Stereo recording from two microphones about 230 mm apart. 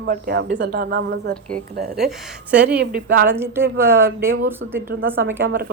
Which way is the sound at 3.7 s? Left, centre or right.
Right.